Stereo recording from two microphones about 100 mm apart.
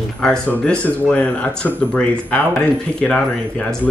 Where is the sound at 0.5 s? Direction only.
20° left (ahead or behind).